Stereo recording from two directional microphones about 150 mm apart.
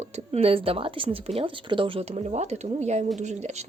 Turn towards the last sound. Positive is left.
turn(degrees=-50)  # may be behind; listen again after turning